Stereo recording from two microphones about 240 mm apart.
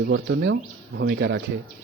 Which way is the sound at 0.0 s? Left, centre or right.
Right.